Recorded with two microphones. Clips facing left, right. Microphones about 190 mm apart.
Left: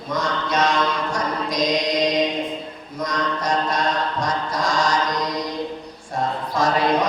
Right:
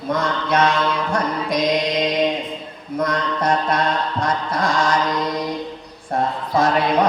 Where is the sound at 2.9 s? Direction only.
55° right (ahead or behind).